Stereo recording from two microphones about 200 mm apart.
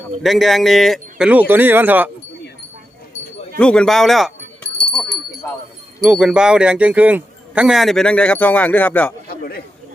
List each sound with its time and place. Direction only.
0.2 s speech: centre (ahead or behind)
3.6 s keys jangling: 5° left (ahead or behind)
6.0 s speech: 5° right (ahead or behind)
9.4 s chatter: 50° left (ahead or behind)